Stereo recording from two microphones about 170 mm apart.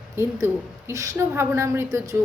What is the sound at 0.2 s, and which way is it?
A woman's voice, 15° right (ahead or behind).